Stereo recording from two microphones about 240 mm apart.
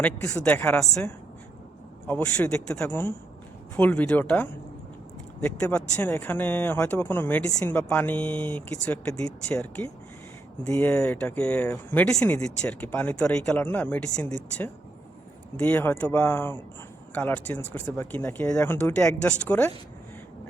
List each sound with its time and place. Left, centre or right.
0.0 s a woman's voice: centre